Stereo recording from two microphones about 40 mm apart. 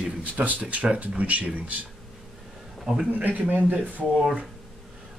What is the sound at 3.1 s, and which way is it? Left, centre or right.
Speech, right.